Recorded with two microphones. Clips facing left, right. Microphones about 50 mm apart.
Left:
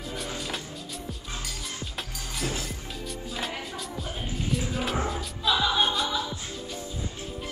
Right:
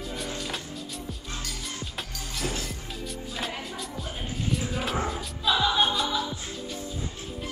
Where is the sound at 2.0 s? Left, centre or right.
Centre.